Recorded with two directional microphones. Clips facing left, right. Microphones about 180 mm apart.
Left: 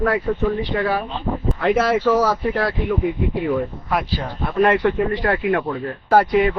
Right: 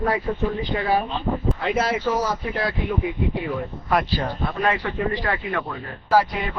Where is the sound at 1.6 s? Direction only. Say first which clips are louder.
Left 9 dB; 65° left (ahead or behind).